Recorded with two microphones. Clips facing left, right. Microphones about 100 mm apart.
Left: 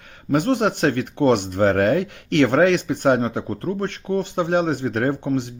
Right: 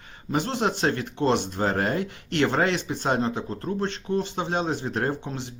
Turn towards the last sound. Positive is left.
turn(degrees=55)  # may be behind; listen again after turning